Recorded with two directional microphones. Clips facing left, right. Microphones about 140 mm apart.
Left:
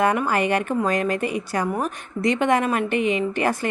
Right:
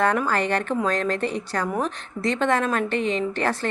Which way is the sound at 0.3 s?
10° left (ahead or behind).